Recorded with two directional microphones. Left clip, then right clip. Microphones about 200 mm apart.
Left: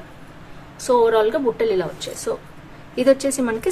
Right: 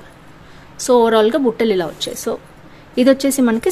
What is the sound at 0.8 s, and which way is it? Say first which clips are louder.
Speech: right 4 dB; 40° right (ahead or behind).